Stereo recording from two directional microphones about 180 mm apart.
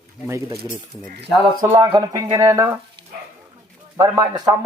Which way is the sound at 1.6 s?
15° right (ahead or behind).